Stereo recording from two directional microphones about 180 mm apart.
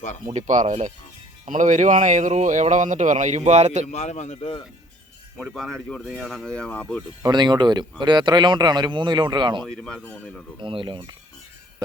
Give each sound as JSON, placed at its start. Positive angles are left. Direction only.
{"t": 0.3, "sound": "speech", "side_deg": -45}
{"t": 3.9, "sound": "a man's voice", "side_deg": 40}
{"t": 5.4, "sound": "speech", "side_deg": 0}
{"t": 7.2, "sound": "speech", "side_deg": -25}
{"t": 9.6, "sound": "speech", "side_deg": 5}
{"t": 10.6, "sound": "speech", "side_deg": -30}